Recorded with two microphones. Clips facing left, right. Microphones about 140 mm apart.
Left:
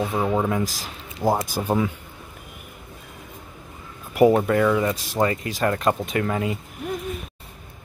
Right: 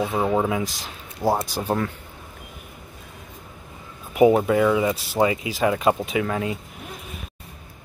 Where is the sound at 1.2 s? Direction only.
10° left (ahead or behind).